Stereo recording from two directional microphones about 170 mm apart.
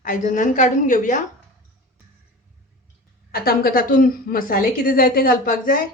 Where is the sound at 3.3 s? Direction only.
60° left (ahead or behind).